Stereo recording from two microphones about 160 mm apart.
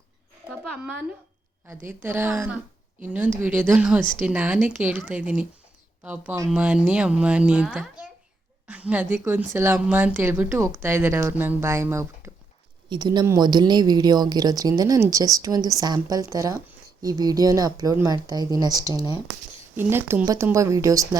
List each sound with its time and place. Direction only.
0.5 s a sound: centre (ahead or behind)
1.6 s speech: 15° right (ahead or behind)
12.9 s speech: 25° right (ahead or behind)